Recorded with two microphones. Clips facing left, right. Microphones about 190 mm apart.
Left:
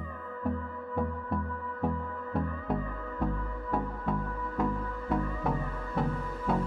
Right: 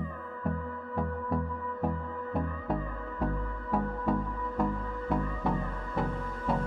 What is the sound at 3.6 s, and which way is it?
Music, centre (ahead or behind).